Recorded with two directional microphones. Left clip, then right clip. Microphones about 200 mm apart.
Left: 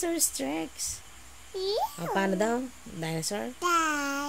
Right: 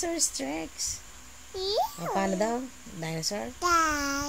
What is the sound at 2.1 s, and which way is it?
Speech, 30° left (ahead or behind).